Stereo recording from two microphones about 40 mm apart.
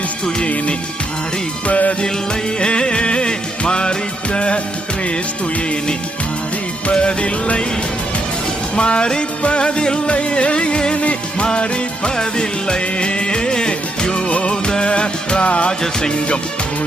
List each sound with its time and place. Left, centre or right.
0.3 s music: left
6.9 s music: left
8.7 s music: left
15.8 s music: centre